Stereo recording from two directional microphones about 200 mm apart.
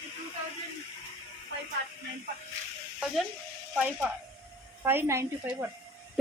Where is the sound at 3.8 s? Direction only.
5° right (ahead or behind).